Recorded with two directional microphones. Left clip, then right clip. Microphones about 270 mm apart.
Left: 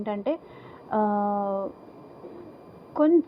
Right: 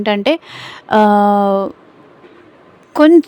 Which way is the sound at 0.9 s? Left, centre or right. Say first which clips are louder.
Right 15 dB; right.